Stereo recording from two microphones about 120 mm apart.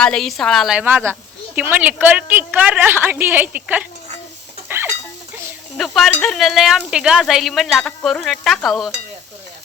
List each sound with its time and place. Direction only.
0.0 s speech: 5° left (ahead or behind)
0.9 s a woman's voice: 15° right (ahead or behind)
4.7 s chicken: 20° right (ahead or behind)
5.7 s speech: centre (ahead or behind)